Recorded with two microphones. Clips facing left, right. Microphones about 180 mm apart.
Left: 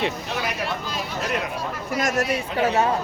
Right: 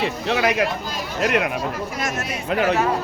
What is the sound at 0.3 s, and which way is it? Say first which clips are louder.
Speech: right 8 dB; 90° right.